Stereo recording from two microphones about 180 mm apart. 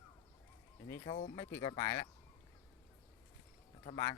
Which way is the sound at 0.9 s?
20° left (ahead or behind).